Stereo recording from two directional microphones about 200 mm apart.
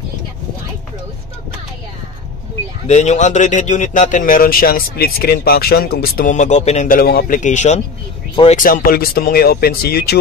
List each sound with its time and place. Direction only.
2.9 s speech: 35° left (ahead or behind); by 10.1 s 50° left (ahead or behind)